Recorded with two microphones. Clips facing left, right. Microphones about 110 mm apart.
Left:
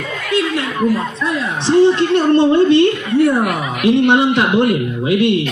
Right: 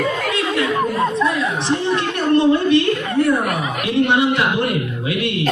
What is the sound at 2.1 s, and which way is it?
Speech, 30° left (ahead or behind).